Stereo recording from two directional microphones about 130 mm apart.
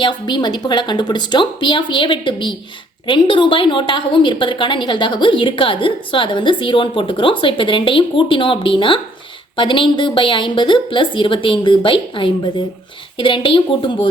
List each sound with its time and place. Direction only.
0.0 s a woman's voice: 35° left (ahead or behind)